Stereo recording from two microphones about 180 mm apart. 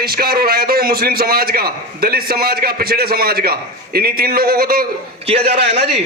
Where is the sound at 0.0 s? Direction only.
60° right (ahead or behind).